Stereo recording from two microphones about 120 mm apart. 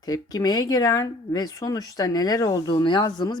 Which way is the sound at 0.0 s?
35° left (ahead or behind).